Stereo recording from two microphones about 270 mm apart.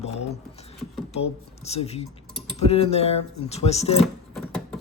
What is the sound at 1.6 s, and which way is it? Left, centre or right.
Speech, left.